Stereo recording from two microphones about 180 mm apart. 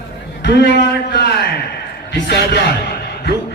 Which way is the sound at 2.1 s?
65° left (ahead or behind).